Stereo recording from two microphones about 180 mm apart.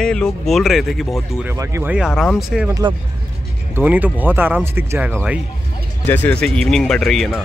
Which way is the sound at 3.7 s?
10° right (ahead or behind).